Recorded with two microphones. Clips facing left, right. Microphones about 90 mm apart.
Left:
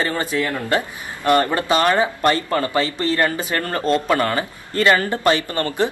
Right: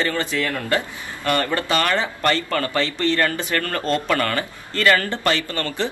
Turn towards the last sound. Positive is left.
turn(degrees=20)  # may be behind; listen again after turning